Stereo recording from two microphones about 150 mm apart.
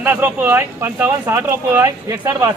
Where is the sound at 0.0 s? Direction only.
15° right (ahead or behind).